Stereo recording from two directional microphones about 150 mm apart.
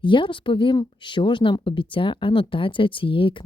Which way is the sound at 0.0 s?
35° left (ahead or behind).